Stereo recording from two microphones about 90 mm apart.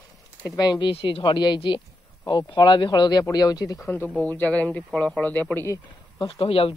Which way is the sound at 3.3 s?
45° left (ahead or behind).